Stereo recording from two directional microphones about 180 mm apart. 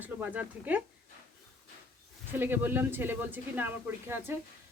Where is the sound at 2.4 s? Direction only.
10° right (ahead or behind).